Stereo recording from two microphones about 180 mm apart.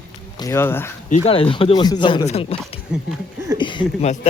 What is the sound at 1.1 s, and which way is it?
A man's voice, 35° left (ahead or behind).